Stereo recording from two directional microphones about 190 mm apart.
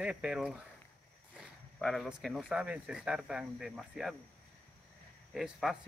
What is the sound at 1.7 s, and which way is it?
Speech, centre (ahead or behind).